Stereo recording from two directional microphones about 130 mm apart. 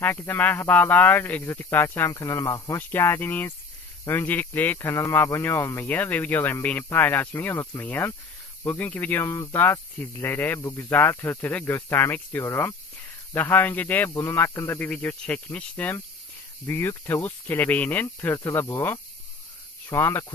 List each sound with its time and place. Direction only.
0.0 s speech: 15° left (ahead or behind)